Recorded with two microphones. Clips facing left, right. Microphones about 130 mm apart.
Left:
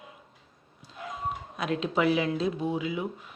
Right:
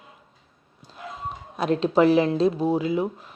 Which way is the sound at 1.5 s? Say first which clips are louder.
Right 8 dB; 35° right (ahead or behind).